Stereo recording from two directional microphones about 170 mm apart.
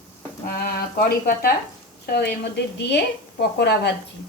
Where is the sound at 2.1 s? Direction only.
75° left (ahead or behind).